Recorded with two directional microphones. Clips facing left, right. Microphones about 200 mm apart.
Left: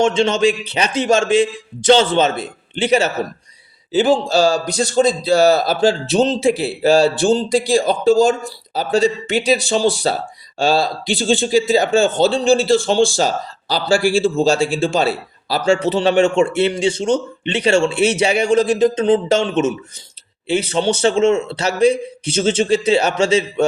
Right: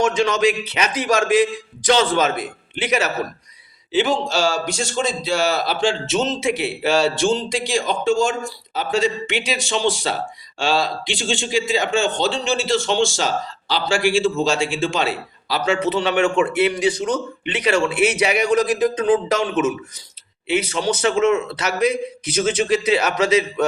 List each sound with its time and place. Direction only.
0.0 s a man's voice: 25° left (ahead or behind)